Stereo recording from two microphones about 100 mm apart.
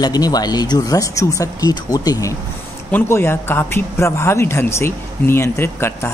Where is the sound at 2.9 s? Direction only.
25° left (ahead or behind).